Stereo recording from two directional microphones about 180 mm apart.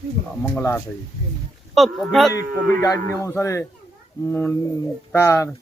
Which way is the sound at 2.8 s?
15° left (ahead or behind).